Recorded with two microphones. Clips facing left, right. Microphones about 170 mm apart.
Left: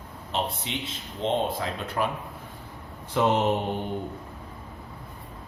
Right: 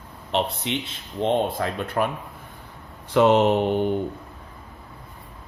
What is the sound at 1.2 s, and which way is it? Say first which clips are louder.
Speech: right 4 dB; 55° right (ahead or behind).